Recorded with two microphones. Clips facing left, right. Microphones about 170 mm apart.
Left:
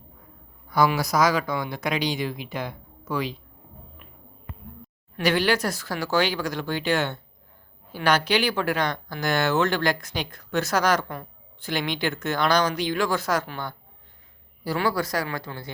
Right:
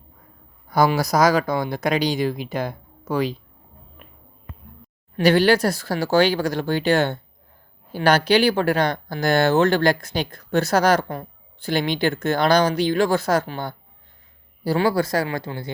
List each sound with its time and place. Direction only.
0.7 s speech: 40° right (ahead or behind)
5.1 s speech: 35° right (ahead or behind)